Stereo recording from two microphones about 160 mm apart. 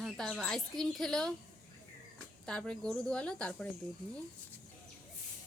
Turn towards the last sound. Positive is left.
turn(degrees=5)  # may be behind; listen again after turning